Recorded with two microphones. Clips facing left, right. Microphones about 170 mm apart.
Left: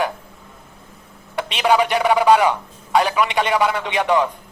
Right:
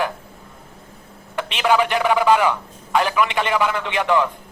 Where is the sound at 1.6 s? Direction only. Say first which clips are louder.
Left 1 dB; 15° left (ahead or behind).